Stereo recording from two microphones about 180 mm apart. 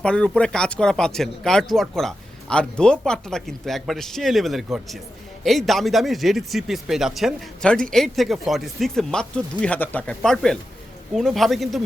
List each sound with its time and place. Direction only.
0.0 s a man's voice: 5° left (ahead or behind)